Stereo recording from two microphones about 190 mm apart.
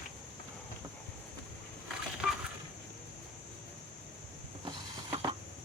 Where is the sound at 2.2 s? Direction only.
5° right (ahead or behind).